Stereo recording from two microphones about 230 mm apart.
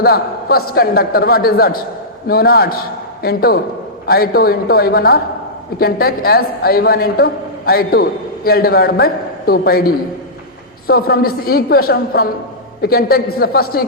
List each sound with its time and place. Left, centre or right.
0.0 s a woman's voice: left